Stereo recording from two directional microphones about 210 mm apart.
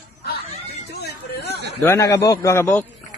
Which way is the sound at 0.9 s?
55° left (ahead or behind).